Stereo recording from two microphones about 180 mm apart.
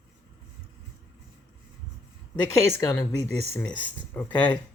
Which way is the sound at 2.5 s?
15° left (ahead or behind).